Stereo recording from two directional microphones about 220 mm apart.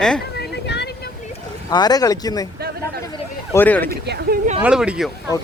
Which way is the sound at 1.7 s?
15° left (ahead or behind).